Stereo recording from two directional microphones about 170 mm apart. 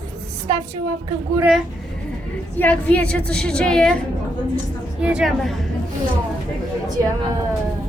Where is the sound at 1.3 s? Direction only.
5° right (ahead or behind).